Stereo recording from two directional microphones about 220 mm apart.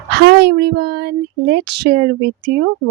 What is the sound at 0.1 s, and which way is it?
Speech, 50° right (ahead or behind).